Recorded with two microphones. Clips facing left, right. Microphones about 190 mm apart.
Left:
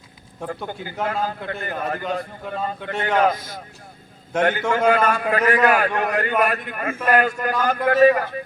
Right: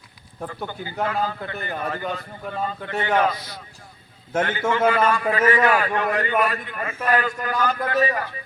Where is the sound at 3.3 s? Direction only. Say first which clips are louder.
Left 5 dB; 50° left (ahead or behind).